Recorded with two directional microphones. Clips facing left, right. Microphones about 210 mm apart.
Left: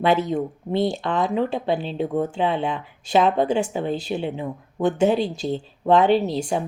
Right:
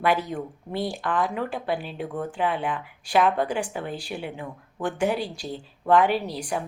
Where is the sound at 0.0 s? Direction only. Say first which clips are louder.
Left 5 dB; 25° left (ahead or behind).